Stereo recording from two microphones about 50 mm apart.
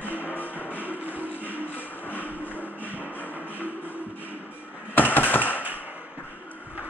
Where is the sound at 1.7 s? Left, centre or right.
Left.